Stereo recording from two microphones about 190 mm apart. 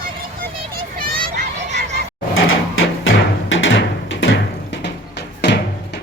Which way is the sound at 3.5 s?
75° left (ahead or behind).